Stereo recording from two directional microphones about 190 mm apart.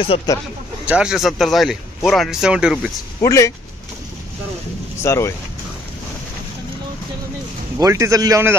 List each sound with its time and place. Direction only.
0.1 s speech: 30° left (ahead or behind)
0.8 s speech: 5° right (ahead or behind)
3.2 s speech: 15° left (ahead or behind)
5.0 s speech: 15° left (ahead or behind)
7.8 s a man's voice: 15° right (ahead or behind)